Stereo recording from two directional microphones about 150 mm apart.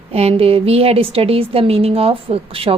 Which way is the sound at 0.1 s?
40° right (ahead or behind).